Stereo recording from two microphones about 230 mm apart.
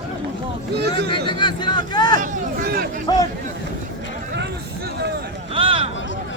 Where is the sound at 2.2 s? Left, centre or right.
Right.